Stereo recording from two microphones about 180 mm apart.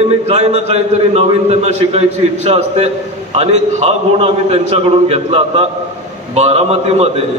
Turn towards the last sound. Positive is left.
turn(degrees=-35)  # may be behind; listen again after turning